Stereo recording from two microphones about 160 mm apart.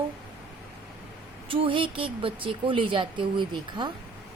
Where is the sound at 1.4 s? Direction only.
35° right (ahead or behind).